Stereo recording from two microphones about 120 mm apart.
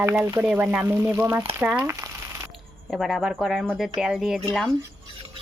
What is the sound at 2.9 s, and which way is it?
Speech, centre (ahead or behind).